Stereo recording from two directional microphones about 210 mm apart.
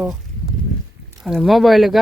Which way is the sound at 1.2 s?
Centre (ahead or behind).